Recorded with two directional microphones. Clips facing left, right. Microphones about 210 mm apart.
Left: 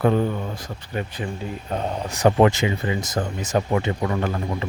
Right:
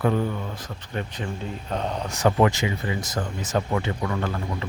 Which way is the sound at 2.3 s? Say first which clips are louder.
Left 4 dB; 25° left (ahead or behind).